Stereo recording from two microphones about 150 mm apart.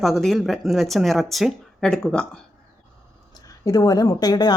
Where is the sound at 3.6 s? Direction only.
20° left (ahead or behind).